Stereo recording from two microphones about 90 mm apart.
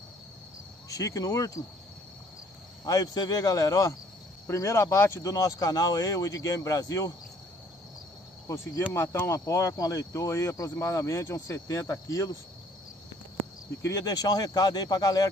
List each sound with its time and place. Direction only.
0.8 s speech: 40° left (ahead or behind)
2.8 s speech: 45° left (ahead or behind)
8.9 s speech: 30° left (ahead or behind)
13.8 s speech: 45° left (ahead or behind)